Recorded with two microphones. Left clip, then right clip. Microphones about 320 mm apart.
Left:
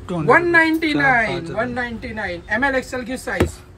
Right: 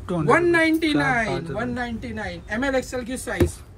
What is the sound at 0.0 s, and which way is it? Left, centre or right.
Speech, centre.